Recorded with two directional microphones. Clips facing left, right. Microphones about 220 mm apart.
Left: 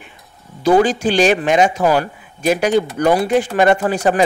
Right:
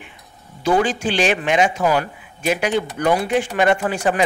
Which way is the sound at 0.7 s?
40° left (ahead or behind).